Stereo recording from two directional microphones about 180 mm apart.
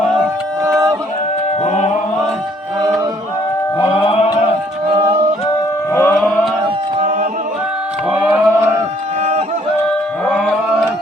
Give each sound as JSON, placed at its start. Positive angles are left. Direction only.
{"t": 1.6, "sound": "chant", "side_deg": 40}
{"t": 3.8, "sound": "music", "side_deg": 30}
{"t": 4.9, "sound": "a capella", "side_deg": -20}
{"t": 5.9, "sound": "a sound", "side_deg": 10}
{"t": 7.0, "sound": "a capella", "side_deg": -45}
{"t": 8.1, "sound": "a sound", "side_deg": -10}
{"t": 10.2, "sound": "music", "side_deg": 5}